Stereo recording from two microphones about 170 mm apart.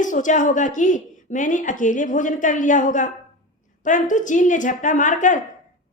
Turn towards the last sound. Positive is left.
turn(degrees=50)  # may be behind; listen again after turning